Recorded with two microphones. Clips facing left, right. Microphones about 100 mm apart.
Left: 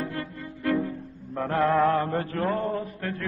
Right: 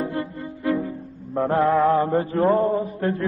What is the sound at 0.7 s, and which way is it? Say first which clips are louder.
Music: right 2 dB; 10° right (ahead or behind).